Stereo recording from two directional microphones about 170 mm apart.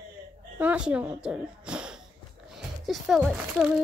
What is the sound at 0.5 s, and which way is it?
Speech, 10° right (ahead or behind).